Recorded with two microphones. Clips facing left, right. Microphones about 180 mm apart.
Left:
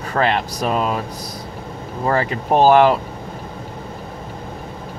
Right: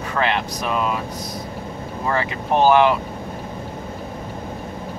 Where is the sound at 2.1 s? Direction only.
35° left (ahead or behind).